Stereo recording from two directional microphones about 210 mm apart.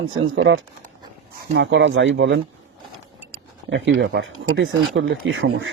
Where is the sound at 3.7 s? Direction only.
60° right (ahead or behind).